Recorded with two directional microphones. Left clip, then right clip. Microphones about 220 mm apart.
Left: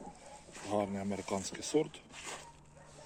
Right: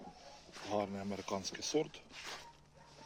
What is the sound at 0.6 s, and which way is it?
Speech, 5° left (ahead or behind).